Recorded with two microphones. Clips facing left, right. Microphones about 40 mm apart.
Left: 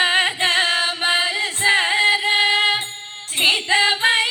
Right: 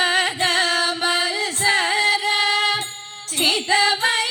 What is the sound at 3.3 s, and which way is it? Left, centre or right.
Female singing, left.